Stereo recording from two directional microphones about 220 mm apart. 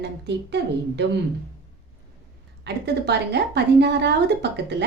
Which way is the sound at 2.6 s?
50° right (ahead or behind).